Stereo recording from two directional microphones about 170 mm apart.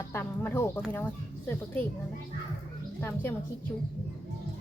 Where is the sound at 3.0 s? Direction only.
15° left (ahead or behind).